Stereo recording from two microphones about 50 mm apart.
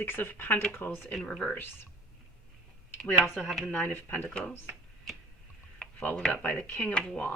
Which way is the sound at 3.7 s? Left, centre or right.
Left.